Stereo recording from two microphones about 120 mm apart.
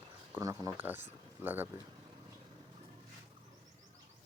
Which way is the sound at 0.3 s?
30° right (ahead or behind).